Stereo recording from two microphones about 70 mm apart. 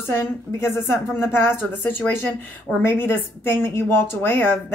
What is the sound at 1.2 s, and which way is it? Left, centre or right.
A woman's voice, left.